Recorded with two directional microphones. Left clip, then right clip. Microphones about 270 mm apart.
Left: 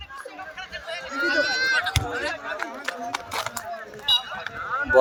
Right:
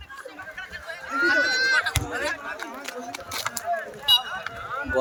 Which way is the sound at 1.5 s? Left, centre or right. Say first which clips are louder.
Right 1 dB; right.